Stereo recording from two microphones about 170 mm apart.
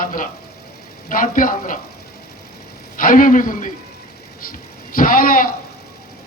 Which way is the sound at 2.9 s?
55° left (ahead or behind).